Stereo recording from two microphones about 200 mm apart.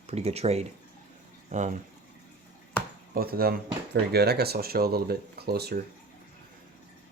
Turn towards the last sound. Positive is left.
turn(degrees=-50)  # may be behind; listen again after turning